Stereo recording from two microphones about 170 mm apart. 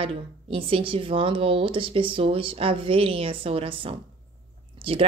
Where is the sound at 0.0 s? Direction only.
30° right (ahead or behind).